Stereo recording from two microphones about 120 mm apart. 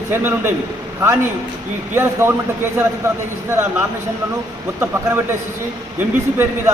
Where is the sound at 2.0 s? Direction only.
20° right (ahead or behind).